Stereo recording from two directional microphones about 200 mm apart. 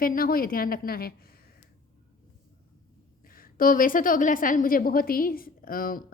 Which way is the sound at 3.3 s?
45° left (ahead or behind).